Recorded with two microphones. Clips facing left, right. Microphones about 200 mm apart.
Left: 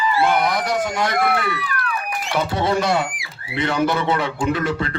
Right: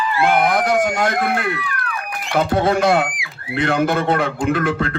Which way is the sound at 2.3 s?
55° right (ahead or behind).